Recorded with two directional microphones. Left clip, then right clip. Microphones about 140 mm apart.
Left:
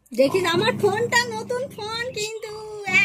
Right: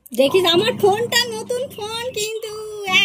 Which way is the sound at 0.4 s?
35° right (ahead or behind).